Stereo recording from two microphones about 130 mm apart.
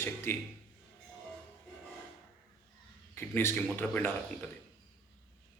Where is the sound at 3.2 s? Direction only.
15° left (ahead or behind).